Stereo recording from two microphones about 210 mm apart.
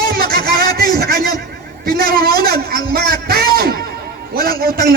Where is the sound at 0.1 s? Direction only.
45° right (ahead or behind).